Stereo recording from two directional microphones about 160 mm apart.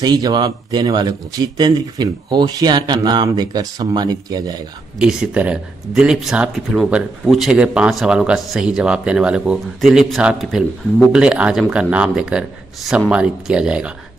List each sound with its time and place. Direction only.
0.0 s speech: 25° right (ahead or behind)
4.9 s speech: 5° right (ahead or behind)